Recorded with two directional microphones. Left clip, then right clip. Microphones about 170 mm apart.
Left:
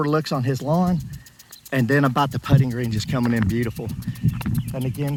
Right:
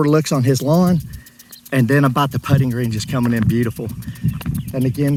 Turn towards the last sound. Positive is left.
turn(degrees=30)  # may be behind; listen again after turning